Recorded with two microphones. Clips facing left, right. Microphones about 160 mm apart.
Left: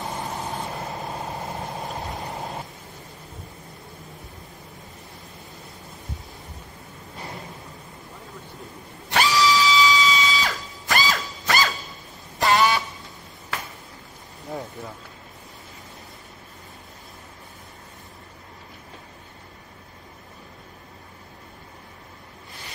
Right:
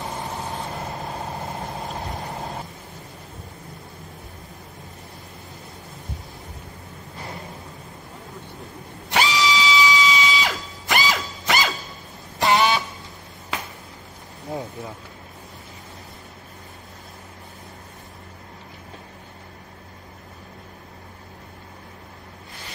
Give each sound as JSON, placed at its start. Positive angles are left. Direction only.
{"t": 2.0, "sound": "vehicle", "side_deg": 0}
{"t": 9.1, "sound": "a sound", "side_deg": -20}
{"t": 12.4, "sound": "vehicle horn", "side_deg": -20}